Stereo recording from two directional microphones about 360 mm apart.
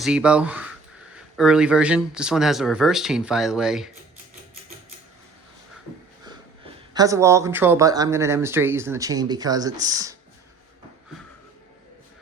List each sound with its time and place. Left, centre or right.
0.0 s speech: centre
6.9 s speech: centre